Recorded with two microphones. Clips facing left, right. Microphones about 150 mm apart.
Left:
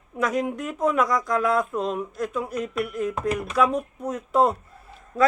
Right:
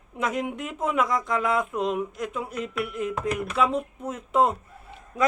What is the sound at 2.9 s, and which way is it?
Speech, 45° left (ahead or behind).